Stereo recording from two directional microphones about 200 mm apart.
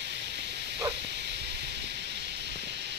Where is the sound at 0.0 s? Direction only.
55° right (ahead or behind).